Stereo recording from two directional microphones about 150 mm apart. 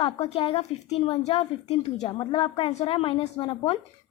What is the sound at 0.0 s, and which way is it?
Speech, 35° left (ahead or behind).